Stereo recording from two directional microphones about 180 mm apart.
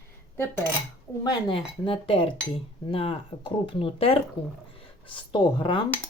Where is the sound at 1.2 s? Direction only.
25° left (ahead or behind).